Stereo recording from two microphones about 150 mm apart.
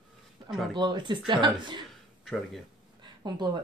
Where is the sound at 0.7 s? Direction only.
30° right (ahead or behind).